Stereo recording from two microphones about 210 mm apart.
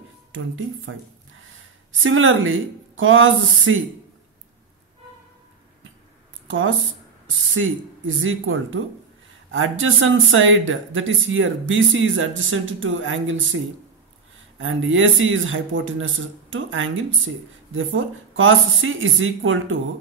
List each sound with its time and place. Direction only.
0.3 s speech: 75° right (ahead or behind)
2.0 s speech: 70° right (ahead or behind)
6.4 s a sound: 65° right (ahead or behind)
7.2 s speech: 70° right (ahead or behind)
14.6 s speech: 70° right (ahead or behind)